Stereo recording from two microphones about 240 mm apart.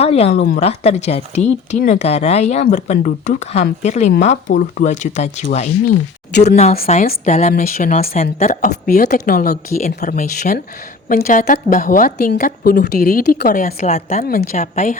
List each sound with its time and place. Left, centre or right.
0.0 s speech: left
6.3 s speech: left
6.8 s a woman's voice: left